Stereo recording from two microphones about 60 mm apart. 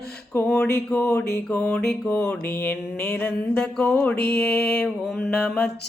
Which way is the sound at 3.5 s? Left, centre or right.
Centre.